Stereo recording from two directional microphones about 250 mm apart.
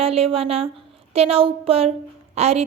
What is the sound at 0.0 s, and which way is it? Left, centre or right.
A woman's voice, right.